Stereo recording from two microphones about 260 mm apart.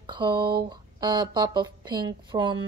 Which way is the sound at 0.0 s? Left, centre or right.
Centre.